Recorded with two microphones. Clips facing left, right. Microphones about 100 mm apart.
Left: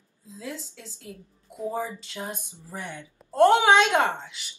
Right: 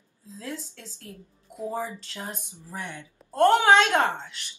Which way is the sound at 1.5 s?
Centre (ahead or behind).